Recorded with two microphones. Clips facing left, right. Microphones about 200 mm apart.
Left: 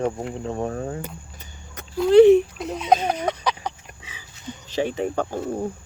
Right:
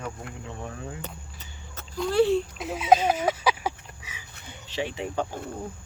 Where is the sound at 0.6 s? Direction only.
50° left (ahead or behind).